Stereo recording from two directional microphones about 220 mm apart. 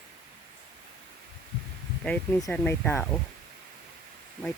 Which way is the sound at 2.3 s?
10° left (ahead or behind).